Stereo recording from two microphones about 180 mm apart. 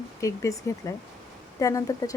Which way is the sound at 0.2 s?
15° left (ahead or behind).